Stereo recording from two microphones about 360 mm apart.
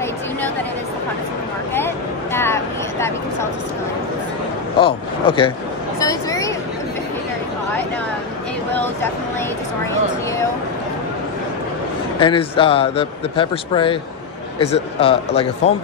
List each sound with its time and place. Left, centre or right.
2.3 s vehicle: centre
4.7 s a man's voice: centre
5.9 s a sound: centre
12.2 s a man's voice: centre